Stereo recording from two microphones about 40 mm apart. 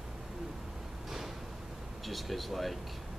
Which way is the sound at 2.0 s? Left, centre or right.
Centre.